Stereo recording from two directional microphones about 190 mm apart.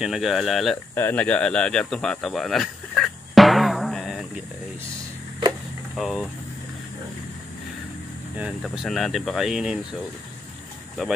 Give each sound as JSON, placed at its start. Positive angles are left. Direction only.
{"t": 0.0, "sound": "speech", "side_deg": 0}
{"t": 0.9, "sound": "a sound", "side_deg": 10}
{"t": 5.9, "sound": "speech", "side_deg": 0}
{"t": 8.4, "sound": "speech", "side_deg": -5}